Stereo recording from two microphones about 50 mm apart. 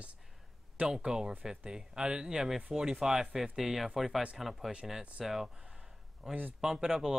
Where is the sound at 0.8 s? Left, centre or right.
Centre.